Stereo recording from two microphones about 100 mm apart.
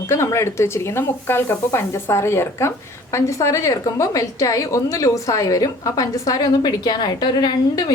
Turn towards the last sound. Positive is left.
turn(degrees=40)  # may be behind; listen again after turning